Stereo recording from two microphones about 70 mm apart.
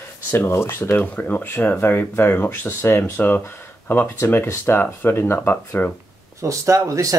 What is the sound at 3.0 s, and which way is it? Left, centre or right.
Speech, left.